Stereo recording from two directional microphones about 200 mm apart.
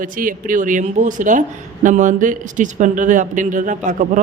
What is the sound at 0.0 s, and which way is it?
A woman's voice, 45° right (ahead or behind).